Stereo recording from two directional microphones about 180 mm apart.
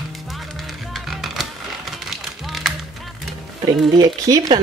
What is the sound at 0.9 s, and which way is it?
Music, centre (ahead or behind).